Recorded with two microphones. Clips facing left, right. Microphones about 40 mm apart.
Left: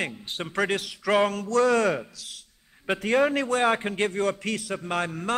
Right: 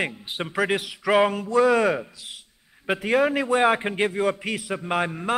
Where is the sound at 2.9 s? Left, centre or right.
Centre.